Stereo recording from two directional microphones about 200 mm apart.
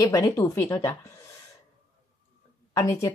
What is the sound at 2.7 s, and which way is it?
Speech, 15° left (ahead or behind).